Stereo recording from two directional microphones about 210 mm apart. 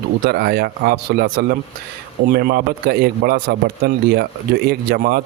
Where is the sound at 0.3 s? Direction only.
50° right (ahead or behind).